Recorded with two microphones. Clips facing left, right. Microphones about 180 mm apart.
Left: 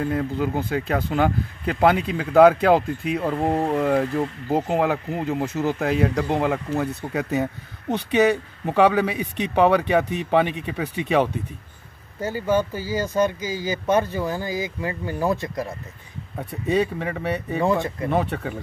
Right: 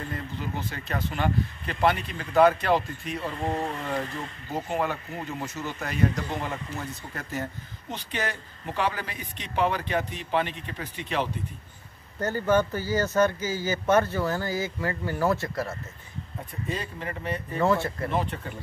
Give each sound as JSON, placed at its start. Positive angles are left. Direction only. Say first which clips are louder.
{"t": 0.1, "sound": "speech", "louder": "left 10 dB", "side_deg": 60}
{"t": 12.2, "sound": "speech", "louder": "left 1 dB", "side_deg": 10}
{"t": 16.4, "sound": "speech", "louder": "left 13 dB", "side_deg": 70}
{"t": 17.6, "sound": "speech", "louder": "left 1 dB", "side_deg": 15}
{"t": 18.2, "sound": "speech", "louder": "left 6 dB", "side_deg": 70}